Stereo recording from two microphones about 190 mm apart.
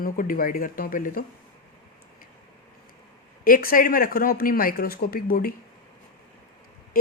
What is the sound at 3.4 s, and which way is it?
Speech, 50° left (ahead or behind).